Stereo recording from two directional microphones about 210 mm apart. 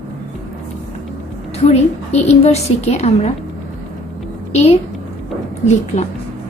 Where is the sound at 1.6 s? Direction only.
30° left (ahead or behind).